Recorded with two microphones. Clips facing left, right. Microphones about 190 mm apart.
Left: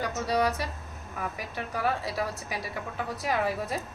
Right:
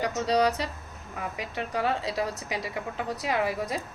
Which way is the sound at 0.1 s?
20° right (ahead or behind).